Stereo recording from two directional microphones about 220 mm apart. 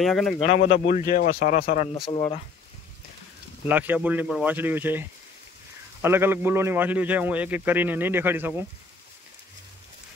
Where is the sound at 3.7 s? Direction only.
10° right (ahead or behind).